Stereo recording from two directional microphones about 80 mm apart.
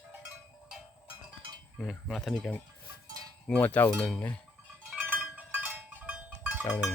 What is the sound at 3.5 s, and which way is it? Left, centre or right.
Cowbell, centre.